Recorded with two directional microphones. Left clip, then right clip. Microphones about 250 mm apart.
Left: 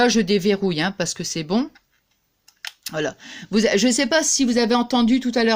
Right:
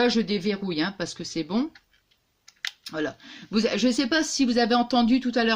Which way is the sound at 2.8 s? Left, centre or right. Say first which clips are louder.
Left 8 dB; left.